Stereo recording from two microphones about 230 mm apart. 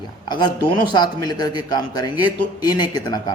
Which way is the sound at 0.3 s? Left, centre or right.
Centre.